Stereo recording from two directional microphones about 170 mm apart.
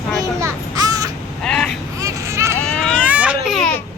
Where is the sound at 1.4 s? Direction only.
5° left (ahead or behind).